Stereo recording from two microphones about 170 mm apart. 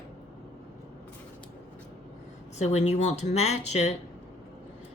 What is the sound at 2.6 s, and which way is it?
Speech, 40° left (ahead or behind).